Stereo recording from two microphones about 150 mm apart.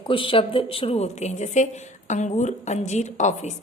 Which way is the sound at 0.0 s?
35° left (ahead or behind).